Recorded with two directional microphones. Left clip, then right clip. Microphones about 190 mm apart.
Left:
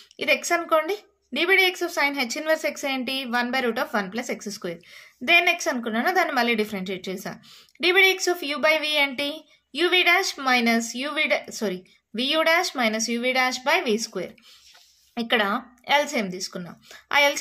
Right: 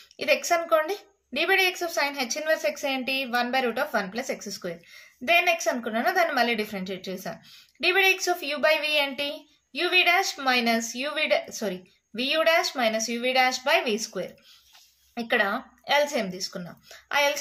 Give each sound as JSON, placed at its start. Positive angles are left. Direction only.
{"t": 0.2, "sound": "a woman's voice", "side_deg": 25}